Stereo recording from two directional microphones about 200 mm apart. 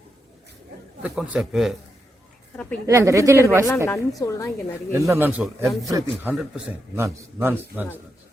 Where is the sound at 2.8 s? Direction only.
15° right (ahead or behind).